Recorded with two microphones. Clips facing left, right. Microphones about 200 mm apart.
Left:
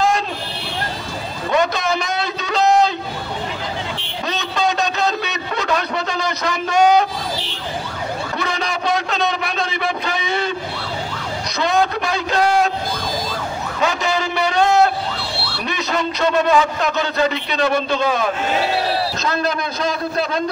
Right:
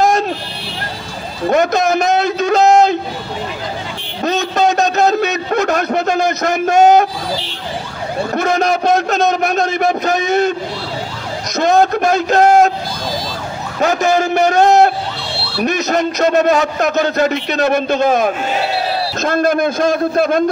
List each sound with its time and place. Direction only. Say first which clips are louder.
1.5 s a man's voice: right 5 dB; 45° right (ahead or behind)
4.2 s a sound: right 7 dB; 45° right (ahead or behind)
8.4 s a man's voice: right 11 dB; 45° right (ahead or behind)
11.5 s a man's voice: right 6 dB; 45° right (ahead or behind)
13.7 s a man's voice: right 7 dB; 45° right (ahead or behind)